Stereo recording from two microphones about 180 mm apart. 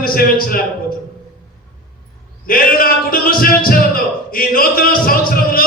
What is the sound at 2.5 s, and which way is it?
A man's voice, 55° left (ahead or behind).